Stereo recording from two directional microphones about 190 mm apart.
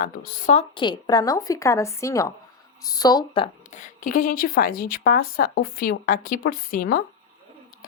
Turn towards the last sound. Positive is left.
turn(degrees=50)  # may be behind; listen again after turning